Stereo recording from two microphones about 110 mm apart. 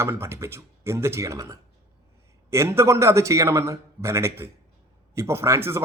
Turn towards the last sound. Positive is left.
turn(degrees=-25)  # may be behind; listen again after turning